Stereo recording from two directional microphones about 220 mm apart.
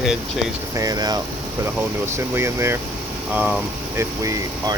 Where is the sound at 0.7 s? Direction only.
15° right (ahead or behind).